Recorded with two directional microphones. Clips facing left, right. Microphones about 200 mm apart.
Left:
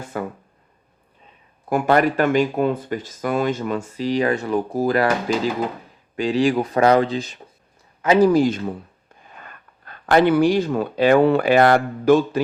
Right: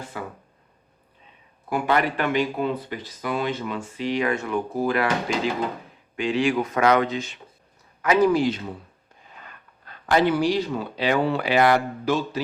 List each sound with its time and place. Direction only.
0.1 s speech: 50° left (ahead or behind)
1.7 s speech: 45° left (ahead or behind)
6.1 s speech: 35° left (ahead or behind)
8.3 s speech: 45° left (ahead or behind)